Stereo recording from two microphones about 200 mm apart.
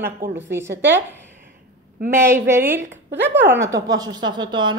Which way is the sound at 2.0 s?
10° right (ahead or behind).